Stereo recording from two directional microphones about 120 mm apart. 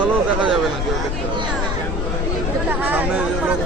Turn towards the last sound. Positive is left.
turn(degrees=-15)  # may be behind; listen again after turning